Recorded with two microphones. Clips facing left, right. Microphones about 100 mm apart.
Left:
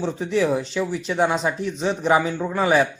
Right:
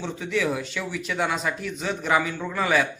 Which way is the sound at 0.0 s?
35° left (ahead or behind).